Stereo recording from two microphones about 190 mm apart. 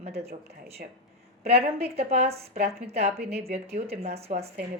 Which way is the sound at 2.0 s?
35° right (ahead or behind).